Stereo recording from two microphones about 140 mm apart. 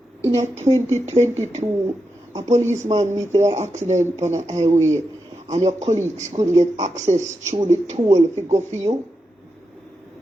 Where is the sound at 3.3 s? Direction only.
55° right (ahead or behind).